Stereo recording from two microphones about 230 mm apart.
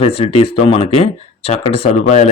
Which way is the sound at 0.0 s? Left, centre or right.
Left.